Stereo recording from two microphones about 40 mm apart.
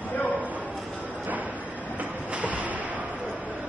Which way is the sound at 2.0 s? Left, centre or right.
Right.